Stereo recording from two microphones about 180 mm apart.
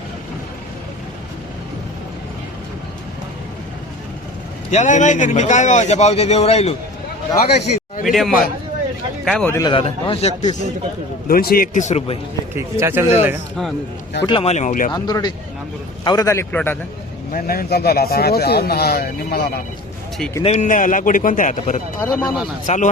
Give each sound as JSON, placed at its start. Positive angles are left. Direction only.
{"t": 4.7, "sound": "a man's voice", "side_deg": 40}
{"t": 8.0, "sound": "a man's voice", "side_deg": 0}
{"t": 9.6, "sound": "a man's voice", "side_deg": 25}
{"t": 11.3, "sound": "a man's voice", "side_deg": 55}
{"t": 12.5, "sound": "speech", "side_deg": -15}
{"t": 14.3, "sound": "a man's voice", "side_deg": 30}
{"t": 14.9, "sound": "a man's voice", "side_deg": 20}
{"t": 17.3, "sound": "speech", "side_deg": 55}
{"t": 20.4, "sound": "a man's voice", "side_deg": 40}
{"t": 22.0, "sound": "a man's voice", "side_deg": 10}
{"t": 22.6, "sound": "a man's voice", "side_deg": 45}